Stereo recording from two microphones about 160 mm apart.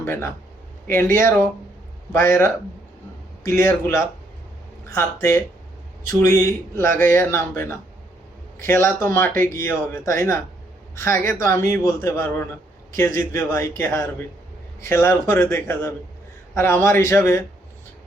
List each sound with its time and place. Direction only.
0.0 s speech: 15° left (ahead or behind)